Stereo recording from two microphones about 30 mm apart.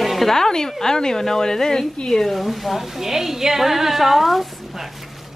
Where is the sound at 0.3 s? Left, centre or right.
Centre.